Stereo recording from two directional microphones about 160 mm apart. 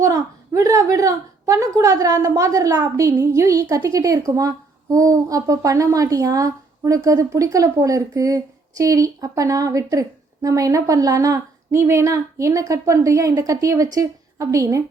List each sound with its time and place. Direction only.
0.0 s a woman's voice: 20° right (ahead or behind)